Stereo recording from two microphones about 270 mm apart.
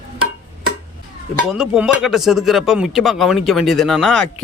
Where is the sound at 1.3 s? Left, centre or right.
Centre.